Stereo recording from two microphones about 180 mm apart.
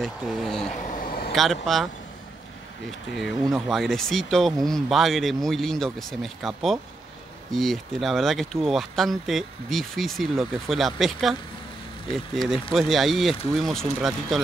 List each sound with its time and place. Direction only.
0.0 s speech: centre (ahead or behind)
0.9 s vehicle: 55° left (ahead or behind)
1.3 s speech: centre (ahead or behind)
3.2 s speech: centre (ahead or behind)